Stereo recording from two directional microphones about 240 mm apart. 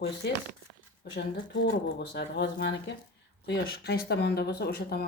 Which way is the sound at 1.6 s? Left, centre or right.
Left.